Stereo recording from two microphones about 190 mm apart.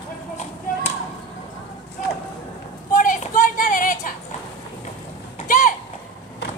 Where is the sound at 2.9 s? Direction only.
45° left (ahead or behind).